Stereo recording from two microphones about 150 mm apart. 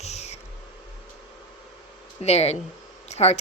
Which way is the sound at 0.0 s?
45° left (ahead or behind).